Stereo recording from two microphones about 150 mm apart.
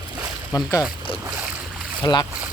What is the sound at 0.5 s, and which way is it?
Speech, 25° left (ahead or behind).